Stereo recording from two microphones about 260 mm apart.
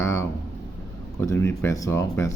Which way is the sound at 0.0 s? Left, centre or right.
Centre.